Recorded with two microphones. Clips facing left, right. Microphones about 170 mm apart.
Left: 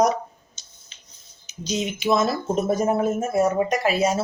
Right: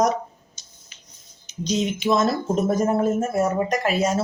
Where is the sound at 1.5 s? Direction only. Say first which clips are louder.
Right 3 dB; 5° left (ahead or behind).